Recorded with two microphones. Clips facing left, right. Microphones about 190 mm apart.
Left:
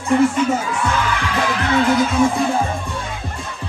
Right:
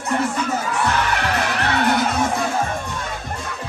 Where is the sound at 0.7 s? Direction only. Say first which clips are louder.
Even; 65° right (ahead or behind).